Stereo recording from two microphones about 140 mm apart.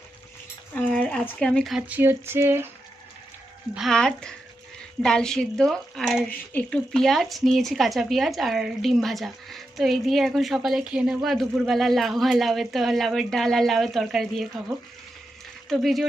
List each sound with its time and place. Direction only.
0.7 s a sound: 10° left (ahead or behind)
1.9 s speech: 15° right (ahead or behind)
3.8 s speech: 5° left (ahead or behind)
15.7 s speech: centre (ahead or behind)